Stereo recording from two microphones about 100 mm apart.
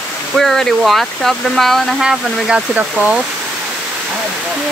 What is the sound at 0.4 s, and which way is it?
Speech, 5° left (ahead or behind).